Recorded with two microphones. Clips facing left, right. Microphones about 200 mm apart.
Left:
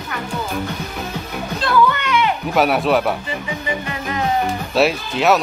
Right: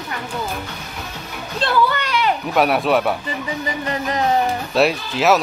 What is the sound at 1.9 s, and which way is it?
Children playing, 35° right (ahead or behind).